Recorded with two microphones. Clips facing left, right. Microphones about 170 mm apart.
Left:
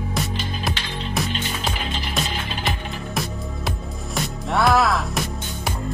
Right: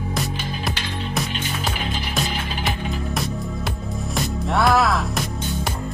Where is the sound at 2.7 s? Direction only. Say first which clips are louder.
Right 2 dB; centre (ahead or behind).